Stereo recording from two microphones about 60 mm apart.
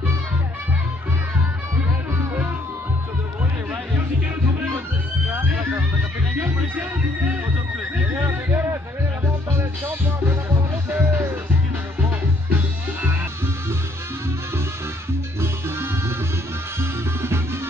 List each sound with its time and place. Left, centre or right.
5.3 s a sound: right
8.3 s music: right
10.9 s music: right
12.4 s music: right